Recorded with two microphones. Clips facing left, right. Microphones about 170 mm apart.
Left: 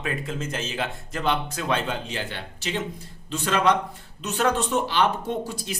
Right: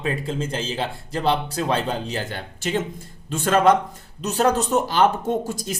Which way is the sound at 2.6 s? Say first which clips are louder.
Right 5 dB; 50° right (ahead or behind).